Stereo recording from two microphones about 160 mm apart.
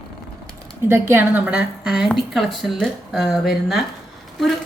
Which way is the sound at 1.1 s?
10° right (ahead or behind).